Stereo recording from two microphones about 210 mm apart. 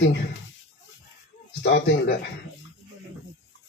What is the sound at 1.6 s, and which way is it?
Speech, 55° left (ahead or behind).